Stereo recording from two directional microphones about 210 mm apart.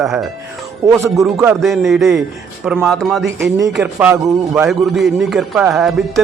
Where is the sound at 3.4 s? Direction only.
15° right (ahead or behind).